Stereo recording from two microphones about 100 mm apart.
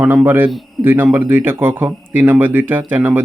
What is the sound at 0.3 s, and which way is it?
A man's voice, 20° right (ahead or behind).